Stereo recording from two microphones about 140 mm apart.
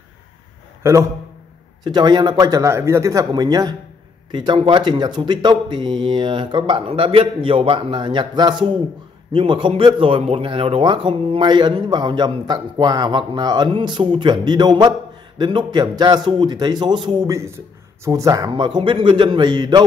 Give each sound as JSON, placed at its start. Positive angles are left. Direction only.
{"t": 1.9, "sound": "a man's voice", "side_deg": -30}